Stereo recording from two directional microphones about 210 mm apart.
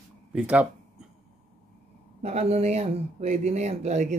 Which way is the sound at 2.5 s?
30° right (ahead or behind).